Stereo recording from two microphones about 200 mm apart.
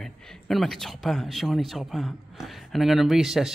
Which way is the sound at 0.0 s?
Centre (ahead or behind).